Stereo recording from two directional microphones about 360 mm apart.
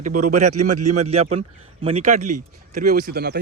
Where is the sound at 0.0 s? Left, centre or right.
Right.